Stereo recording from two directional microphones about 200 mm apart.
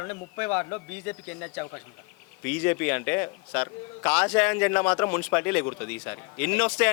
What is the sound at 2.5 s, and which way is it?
A man's voice, 10° left (ahead or behind).